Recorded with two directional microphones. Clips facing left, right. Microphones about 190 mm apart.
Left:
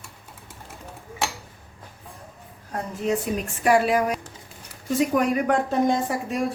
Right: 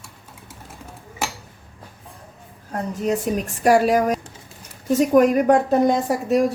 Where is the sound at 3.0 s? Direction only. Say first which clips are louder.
Right 2 dB; 40° right (ahead or behind).